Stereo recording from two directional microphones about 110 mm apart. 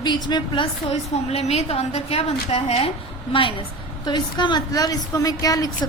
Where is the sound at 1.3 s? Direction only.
70° left (ahead or behind).